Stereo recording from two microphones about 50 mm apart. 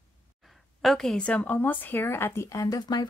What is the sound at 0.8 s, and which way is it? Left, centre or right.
Speech, centre.